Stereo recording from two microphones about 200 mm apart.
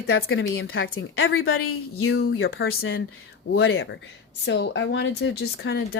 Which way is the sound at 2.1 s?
55° left (ahead or behind).